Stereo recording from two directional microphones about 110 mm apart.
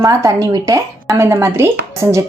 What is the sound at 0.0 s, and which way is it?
A woman's voice, 30° right (ahead or behind).